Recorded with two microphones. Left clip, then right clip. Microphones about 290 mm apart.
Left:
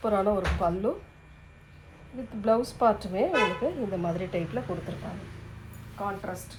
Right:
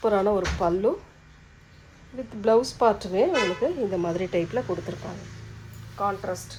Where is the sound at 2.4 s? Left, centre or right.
Right.